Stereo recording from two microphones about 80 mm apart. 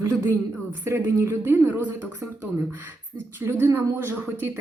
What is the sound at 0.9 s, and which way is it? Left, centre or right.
Speech, right.